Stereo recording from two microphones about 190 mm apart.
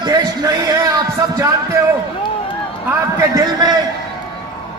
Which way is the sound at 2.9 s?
15° right (ahead or behind).